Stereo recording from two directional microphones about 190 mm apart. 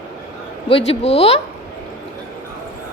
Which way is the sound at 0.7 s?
30° left (ahead or behind).